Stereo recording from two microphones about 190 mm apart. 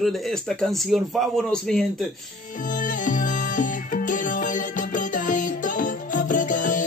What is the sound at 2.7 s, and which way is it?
Music, 45° left (ahead or behind).